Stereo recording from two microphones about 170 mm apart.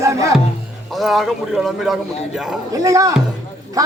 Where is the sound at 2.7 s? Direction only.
20° right (ahead or behind).